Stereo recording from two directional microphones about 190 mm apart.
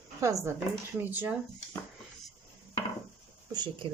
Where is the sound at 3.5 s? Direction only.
20° right (ahead or behind).